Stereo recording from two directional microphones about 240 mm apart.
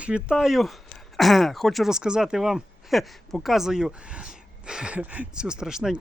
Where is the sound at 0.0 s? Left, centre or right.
Centre.